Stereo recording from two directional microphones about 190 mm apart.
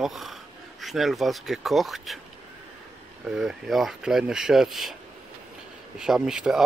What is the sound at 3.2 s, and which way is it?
Speech, 5° right (ahead or behind).